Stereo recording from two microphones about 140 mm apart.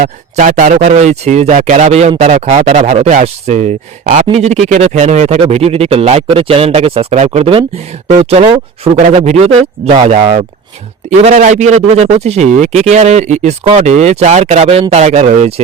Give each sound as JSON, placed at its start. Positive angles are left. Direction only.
{"t": 0.0, "sound": "speech", "side_deg": -70}
{"t": 4.0, "sound": "speech", "side_deg": -70}
{"t": 4.3, "sound": "speech", "side_deg": -50}
{"t": 10.1, "sound": "speech", "side_deg": -60}